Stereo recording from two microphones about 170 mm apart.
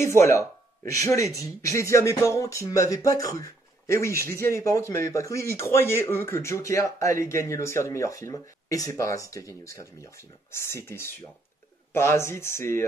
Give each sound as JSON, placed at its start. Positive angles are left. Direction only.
{"t": 0.2, "sound": "speech", "side_deg": 15}